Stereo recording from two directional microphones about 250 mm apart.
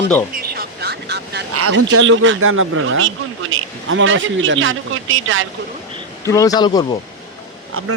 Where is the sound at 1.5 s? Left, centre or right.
Right.